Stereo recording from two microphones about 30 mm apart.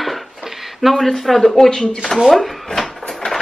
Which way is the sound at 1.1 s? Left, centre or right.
Centre.